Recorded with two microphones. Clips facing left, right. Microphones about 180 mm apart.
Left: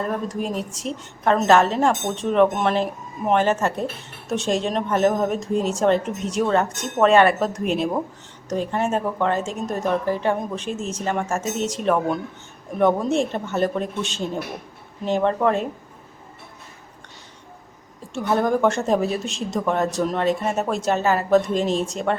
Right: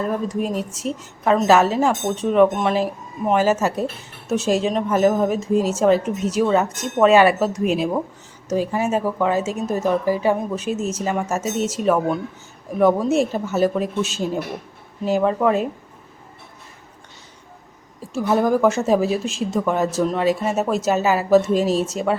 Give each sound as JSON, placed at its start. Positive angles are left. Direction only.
{"t": 0.0, "sound": "speech", "side_deg": 0}
{"t": 18.1, "sound": "speech", "side_deg": -5}